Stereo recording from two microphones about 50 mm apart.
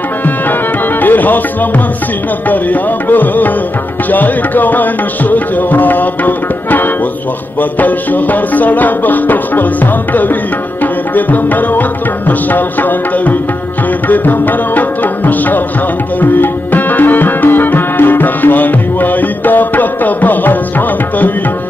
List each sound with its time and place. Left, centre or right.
1.0 s music: left
2.5 s music: left
10.8 s tabla: left
12.3 s music: left